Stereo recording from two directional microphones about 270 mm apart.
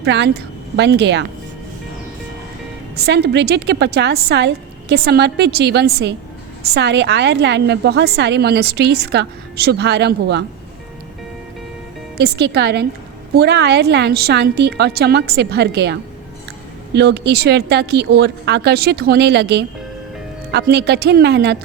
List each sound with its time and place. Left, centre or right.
0.0 s a woman's voice: right
2.9 s a woman's voice: right
12.1 s a woman's voice: right